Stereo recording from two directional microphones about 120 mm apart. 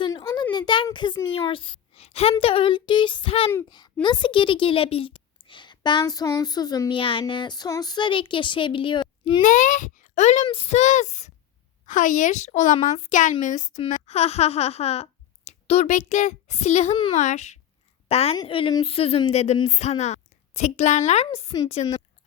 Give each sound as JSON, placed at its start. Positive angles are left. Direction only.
{"t": 0.5, "sound": "a sound", "side_deg": 40}
{"t": 0.9, "sound": "speech", "side_deg": 40}
{"t": 4.0, "sound": "a woman's voice", "side_deg": 40}
{"t": 7.0, "sound": "speech", "side_deg": 45}
{"t": 9.4, "sound": "a child's voice", "side_deg": 90}
{"t": 10.4, "sound": "a sound", "side_deg": 50}
{"t": 11.9, "sound": "speech", "side_deg": 90}
{"t": 13.9, "sound": "speech", "side_deg": 60}
{"t": 17.2, "sound": "a sound", "side_deg": 80}
{"t": 18.1, "sound": "a woman's voice", "side_deg": 60}
{"t": 18.4, "sound": "a woman's voice", "side_deg": 50}
{"t": 21.5, "sound": "a woman's voice", "side_deg": 40}